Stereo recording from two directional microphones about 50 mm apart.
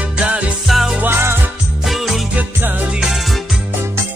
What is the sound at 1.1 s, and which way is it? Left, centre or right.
Music, right.